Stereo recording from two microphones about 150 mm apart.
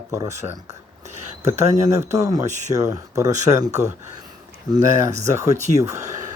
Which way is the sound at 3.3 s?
50° right (ahead or behind).